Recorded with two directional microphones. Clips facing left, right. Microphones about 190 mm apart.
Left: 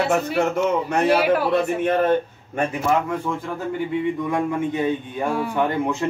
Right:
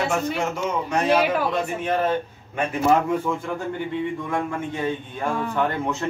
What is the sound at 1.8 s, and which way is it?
Speech, 55° left (ahead or behind).